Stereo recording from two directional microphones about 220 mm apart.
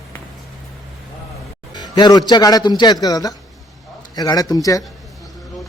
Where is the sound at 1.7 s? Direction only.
20° left (ahead or behind).